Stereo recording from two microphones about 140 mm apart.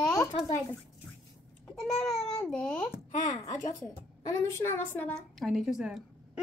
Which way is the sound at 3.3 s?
60° left (ahead or behind).